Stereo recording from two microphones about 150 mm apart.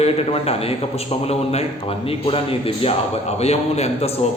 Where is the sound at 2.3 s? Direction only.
40° left (ahead or behind).